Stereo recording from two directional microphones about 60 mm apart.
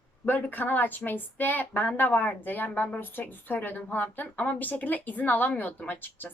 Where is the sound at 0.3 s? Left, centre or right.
Left.